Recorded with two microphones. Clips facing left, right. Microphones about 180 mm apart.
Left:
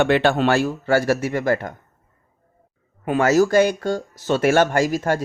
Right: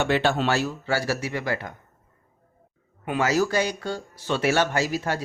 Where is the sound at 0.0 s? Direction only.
60° left (ahead or behind).